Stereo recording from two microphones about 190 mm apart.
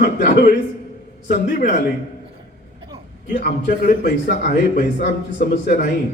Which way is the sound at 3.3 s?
45° left (ahead or behind).